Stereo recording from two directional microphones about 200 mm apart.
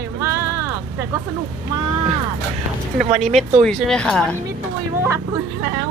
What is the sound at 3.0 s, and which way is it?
Speech, 30° right (ahead or behind).